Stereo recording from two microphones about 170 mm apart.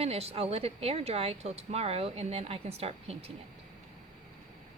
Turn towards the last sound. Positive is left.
turn(degrees=-35)  # may be behind; listen again after turning